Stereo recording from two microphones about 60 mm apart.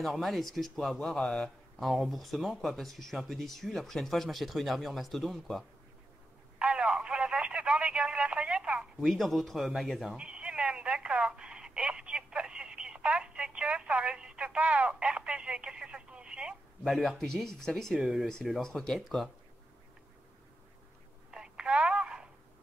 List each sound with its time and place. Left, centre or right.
0.0 s speech: centre
6.6 s telephone: centre
9.0 s speech: centre
10.1 s telephone: centre
16.8 s speech: centre
18.0 s speech: centre
18.6 s speech: centre
21.3 s telephone: centre